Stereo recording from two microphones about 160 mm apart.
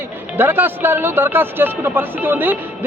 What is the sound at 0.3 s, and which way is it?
Speech, 15° right (ahead or behind).